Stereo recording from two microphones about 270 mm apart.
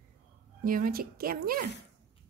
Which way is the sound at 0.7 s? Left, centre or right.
Right.